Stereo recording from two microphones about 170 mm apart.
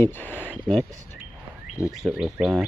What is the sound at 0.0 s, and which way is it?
Speech, 10° left (ahead or behind).